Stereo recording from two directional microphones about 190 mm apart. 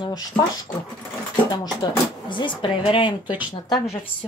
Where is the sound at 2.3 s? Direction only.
25° left (ahead or behind).